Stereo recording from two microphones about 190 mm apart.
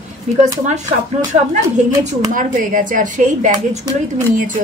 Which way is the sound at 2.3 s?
45° right (ahead or behind).